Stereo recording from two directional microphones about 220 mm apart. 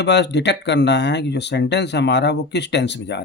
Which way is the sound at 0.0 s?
50° left (ahead or behind).